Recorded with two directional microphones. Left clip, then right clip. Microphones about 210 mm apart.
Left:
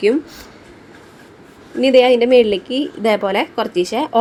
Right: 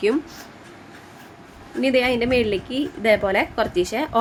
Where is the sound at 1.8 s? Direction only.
15° left (ahead or behind).